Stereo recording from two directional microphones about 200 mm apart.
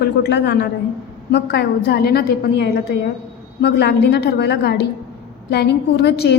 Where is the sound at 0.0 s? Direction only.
60° left (ahead or behind).